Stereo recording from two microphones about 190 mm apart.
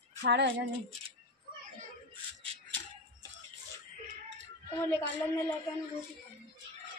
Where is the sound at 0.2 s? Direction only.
65° right (ahead or behind).